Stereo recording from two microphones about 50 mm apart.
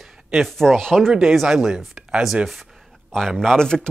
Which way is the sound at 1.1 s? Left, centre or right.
Centre.